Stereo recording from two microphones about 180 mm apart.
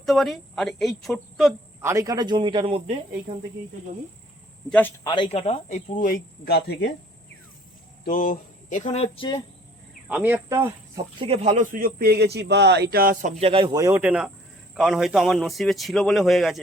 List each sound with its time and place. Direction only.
0.0 s a man's voice: centre (ahead or behind)
1.8 s speech: 15° right (ahead or behind); by 3.3 s 30° right (ahead or behind)
5.0 s speech: 25° left (ahead or behind); by 6.9 s 65° left (ahead or behind)
8.0 s speech: 50° left (ahead or behind); by 9.4 s 30° left (ahead or behind)
10.1 s speech: 10° right (ahead or behind)
10.9 s speech: 30° right (ahead or behind); by 13.3 s 55° right (ahead or behind)
13.4 s speech: 30° right (ahead or behind)
13.7 s a man's voice: 15° right (ahead or behind); by 16.6 s centre (ahead or behind)